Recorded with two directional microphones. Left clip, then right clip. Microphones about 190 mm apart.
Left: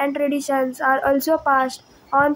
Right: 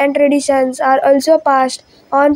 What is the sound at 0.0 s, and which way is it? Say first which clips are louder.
A woman's voice: right 10 dB; 30° right (ahead or behind).